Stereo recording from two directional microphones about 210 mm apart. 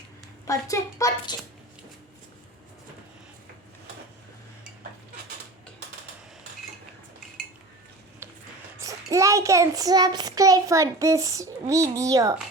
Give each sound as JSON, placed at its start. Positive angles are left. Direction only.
{"t": 0.4, "sound": "a child's voice", "side_deg": 15}
{"t": 8.8, "sound": "child singing", "side_deg": -15}